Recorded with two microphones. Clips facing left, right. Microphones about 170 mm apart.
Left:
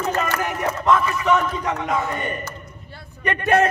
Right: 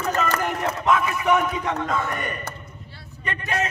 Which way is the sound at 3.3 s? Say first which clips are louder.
Left 9 dB; 60° left (ahead or behind).